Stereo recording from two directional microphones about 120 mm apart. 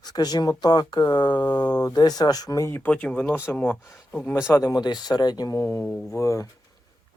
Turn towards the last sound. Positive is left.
turn(degrees=25)  # may be behind; listen again after turning